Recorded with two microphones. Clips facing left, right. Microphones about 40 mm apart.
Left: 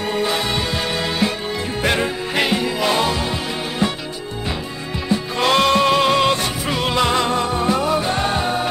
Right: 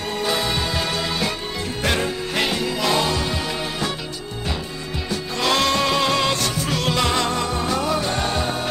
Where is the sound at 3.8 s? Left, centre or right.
Left.